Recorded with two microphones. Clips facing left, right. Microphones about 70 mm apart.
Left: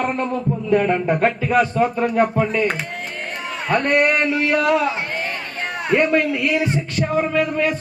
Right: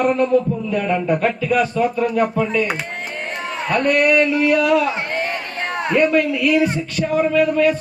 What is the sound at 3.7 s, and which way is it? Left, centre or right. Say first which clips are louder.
A man's voice: right 2 dB; left.